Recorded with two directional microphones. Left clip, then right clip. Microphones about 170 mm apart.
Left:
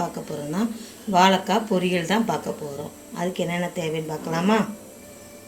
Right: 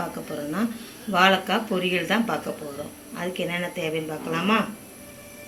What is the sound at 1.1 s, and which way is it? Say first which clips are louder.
Speech: left 1 dB; 40° left (ahead or behind).